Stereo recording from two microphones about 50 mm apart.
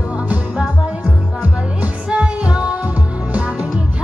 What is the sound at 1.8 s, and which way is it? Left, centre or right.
Music, right.